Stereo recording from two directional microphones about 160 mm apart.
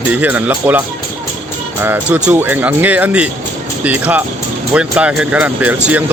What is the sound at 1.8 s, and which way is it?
Speech, 10° right (ahead or behind).